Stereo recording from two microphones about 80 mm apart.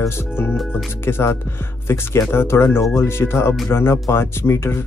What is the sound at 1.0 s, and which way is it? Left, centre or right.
Speech, left.